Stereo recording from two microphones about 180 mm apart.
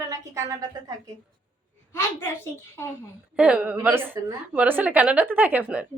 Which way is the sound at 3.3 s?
5° right (ahead or behind).